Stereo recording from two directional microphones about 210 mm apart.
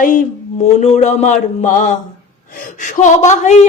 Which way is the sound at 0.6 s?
35° left (ahead or behind).